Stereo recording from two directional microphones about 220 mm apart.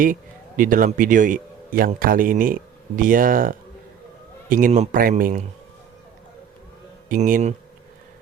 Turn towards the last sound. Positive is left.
turn(degrees=-30)  # may be behind; listen again after turning